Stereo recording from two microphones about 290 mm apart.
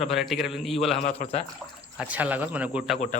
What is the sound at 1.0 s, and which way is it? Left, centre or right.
Speech, left.